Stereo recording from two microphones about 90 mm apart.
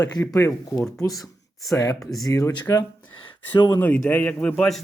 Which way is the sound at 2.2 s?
35° left (ahead or behind).